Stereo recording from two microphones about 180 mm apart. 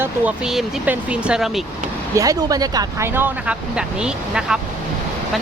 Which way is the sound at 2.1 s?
20° right (ahead or behind).